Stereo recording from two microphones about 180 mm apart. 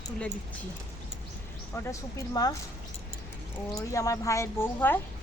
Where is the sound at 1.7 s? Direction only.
15° left (ahead or behind).